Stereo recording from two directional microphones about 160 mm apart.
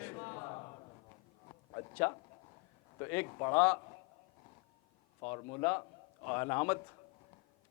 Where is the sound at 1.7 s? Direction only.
25° left (ahead or behind).